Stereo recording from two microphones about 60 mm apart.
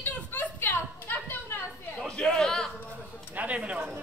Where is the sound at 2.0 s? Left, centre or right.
Centre.